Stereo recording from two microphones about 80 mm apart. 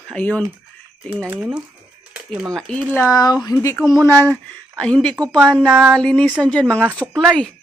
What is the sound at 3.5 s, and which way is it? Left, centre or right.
Speech, left.